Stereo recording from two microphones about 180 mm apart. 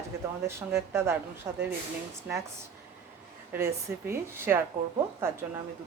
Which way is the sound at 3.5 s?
15° right (ahead or behind).